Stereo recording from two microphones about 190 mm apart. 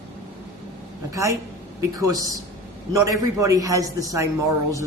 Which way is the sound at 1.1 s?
15° right (ahead or behind).